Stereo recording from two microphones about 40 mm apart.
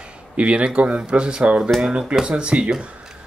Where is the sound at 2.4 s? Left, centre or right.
Right.